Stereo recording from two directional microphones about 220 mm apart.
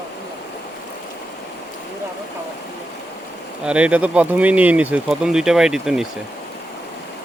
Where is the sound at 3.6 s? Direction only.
5° right (ahead or behind).